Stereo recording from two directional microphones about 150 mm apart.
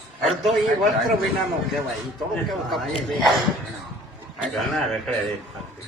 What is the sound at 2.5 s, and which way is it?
Speech, centre (ahead or behind).